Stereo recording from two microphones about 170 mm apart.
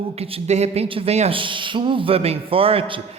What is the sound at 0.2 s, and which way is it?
A man's voice, 35° right (ahead or behind).